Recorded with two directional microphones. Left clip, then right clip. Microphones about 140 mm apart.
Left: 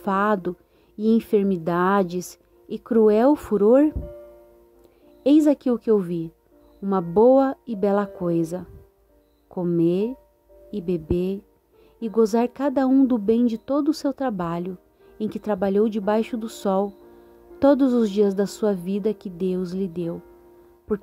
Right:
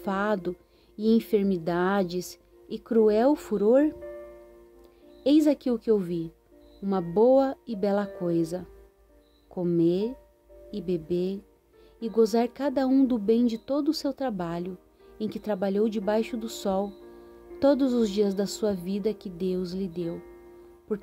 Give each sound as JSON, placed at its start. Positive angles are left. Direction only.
{"t": 0.0, "sound": "speech", "side_deg": 50}
{"t": 5.2, "sound": "speech", "side_deg": 50}